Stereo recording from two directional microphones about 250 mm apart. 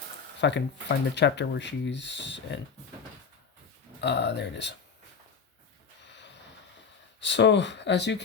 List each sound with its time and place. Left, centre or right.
0.4 s speech: left
4.0 s speech: left
6.0 s a sound: left
7.2 s speech: left